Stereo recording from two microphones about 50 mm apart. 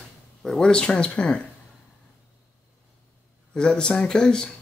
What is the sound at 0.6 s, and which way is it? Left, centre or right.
Speech, centre.